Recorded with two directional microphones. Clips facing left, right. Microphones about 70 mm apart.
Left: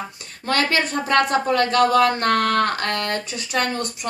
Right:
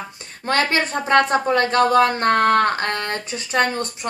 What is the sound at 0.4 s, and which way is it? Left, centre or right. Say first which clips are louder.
A woman's voice: right 1 dB; right.